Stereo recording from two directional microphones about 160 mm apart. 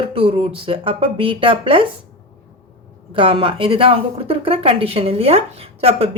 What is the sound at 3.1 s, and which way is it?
A woman's voice, 35° right (ahead or behind).